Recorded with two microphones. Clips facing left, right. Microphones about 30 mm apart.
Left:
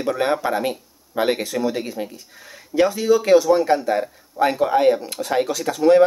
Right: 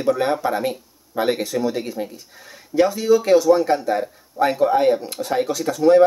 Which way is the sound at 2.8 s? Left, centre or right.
Left.